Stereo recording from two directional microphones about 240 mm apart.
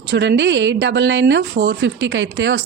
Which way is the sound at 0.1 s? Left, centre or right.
Right.